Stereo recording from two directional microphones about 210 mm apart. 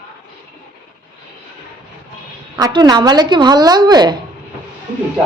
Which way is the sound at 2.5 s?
20° right (ahead or behind).